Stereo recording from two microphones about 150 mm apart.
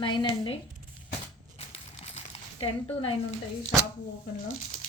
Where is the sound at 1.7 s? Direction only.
45° left (ahead or behind).